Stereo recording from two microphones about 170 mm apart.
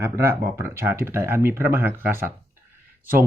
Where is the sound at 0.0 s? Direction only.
15° right (ahead or behind).